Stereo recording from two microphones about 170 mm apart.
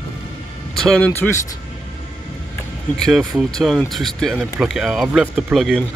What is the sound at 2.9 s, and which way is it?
Speech, centre (ahead or behind).